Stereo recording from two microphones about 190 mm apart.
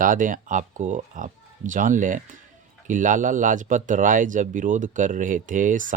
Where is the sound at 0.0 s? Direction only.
45° right (ahead or behind).